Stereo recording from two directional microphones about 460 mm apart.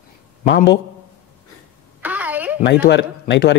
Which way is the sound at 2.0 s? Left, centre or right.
Centre.